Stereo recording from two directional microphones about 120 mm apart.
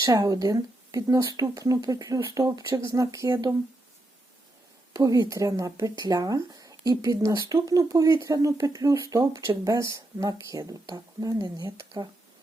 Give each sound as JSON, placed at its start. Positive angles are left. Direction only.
{"t": 0.0, "sound": "speech", "side_deg": -30}
{"t": 4.9, "sound": "speech", "side_deg": -30}